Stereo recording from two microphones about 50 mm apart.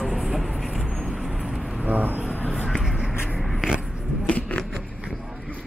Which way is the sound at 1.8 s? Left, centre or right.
Right.